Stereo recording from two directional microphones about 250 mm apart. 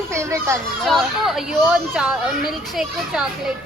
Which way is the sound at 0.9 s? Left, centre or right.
Centre.